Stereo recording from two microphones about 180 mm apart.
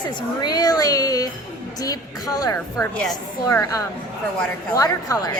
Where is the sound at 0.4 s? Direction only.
20° left (ahead or behind).